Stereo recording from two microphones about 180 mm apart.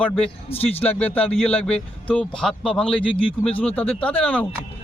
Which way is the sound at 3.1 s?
30° left (ahead or behind).